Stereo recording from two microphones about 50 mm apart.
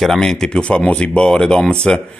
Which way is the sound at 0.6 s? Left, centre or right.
Left.